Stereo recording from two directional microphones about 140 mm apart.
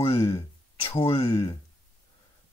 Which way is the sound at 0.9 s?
40° left (ahead or behind).